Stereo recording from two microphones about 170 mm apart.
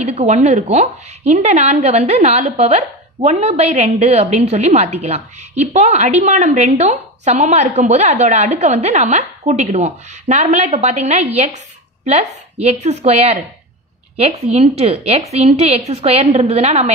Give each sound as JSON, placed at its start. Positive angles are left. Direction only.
{"t": 0.0, "sound": "a woman's voice", "side_deg": -40}